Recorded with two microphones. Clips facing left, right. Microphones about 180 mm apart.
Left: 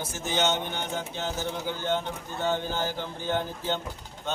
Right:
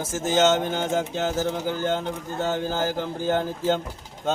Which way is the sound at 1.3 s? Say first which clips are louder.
Right 6 dB; 45° right (ahead or behind).